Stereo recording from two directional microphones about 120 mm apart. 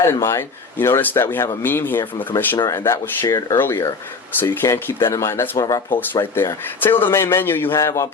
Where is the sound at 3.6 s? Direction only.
20° left (ahead or behind).